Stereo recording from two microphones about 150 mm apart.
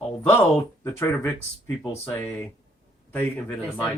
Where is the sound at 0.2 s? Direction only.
15° left (ahead or behind).